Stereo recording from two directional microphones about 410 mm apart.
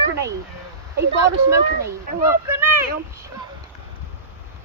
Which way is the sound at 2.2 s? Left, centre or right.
Centre.